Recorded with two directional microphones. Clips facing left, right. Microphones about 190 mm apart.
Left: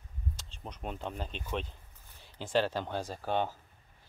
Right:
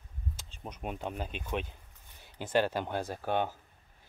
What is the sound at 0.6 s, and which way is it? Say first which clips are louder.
Speech: right 2 dB; 10° right (ahead or behind).